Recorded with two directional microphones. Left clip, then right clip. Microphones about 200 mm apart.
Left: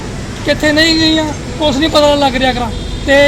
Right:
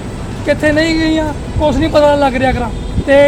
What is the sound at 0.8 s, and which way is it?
Speech, 25° right (ahead or behind).